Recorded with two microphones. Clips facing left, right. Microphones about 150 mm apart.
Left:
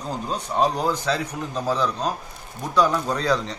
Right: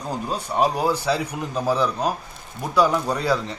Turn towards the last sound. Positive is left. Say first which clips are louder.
# even
turn(degrees=-5)  # may be behind; listen again after turning